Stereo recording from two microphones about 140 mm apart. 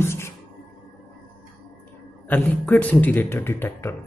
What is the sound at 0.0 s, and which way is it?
Music, 20° left (ahead or behind).